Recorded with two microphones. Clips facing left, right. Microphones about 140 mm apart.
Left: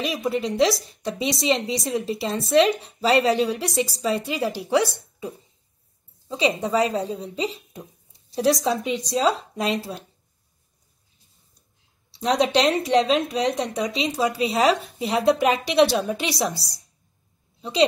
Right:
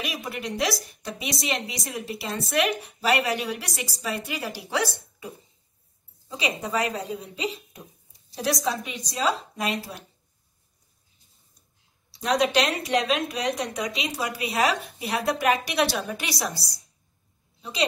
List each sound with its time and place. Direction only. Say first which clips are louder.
0.0 s a woman's voice: left 8 dB; 25° left (ahead or behind)
12.1 s a woman's voice: left 3 dB; 25° left (ahead or behind)